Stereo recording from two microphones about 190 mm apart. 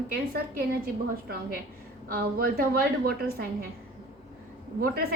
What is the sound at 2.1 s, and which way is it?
A woman's voice, 50° right (ahead or behind).